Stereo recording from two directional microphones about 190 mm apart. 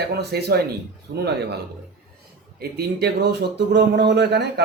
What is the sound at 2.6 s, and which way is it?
A man's voice, 55° right (ahead or behind).